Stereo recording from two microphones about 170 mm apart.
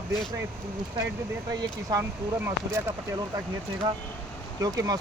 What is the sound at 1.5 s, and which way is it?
Speech, 20° right (ahead or behind).